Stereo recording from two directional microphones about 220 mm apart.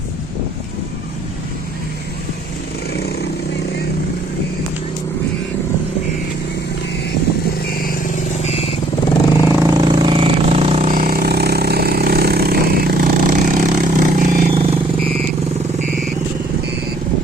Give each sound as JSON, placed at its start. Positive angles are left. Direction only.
{"t": 7.7, "sound": "vehicle", "side_deg": 40}
{"t": 9.6, "sound": "vehicle", "side_deg": -20}